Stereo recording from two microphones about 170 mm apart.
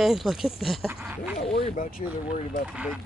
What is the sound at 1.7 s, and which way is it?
Speech, 55° left (ahead or behind).